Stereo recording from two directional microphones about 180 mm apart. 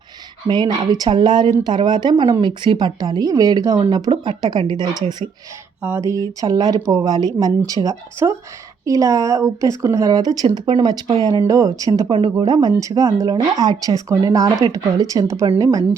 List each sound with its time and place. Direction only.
0.4 s a woman's voice: 25° right (ahead or behind)